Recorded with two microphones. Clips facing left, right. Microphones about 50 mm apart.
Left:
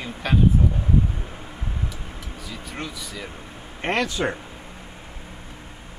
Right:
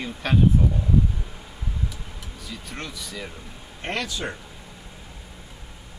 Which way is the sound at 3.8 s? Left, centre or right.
Left.